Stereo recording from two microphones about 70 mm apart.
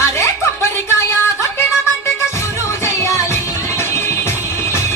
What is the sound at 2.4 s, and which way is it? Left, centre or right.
Music, left.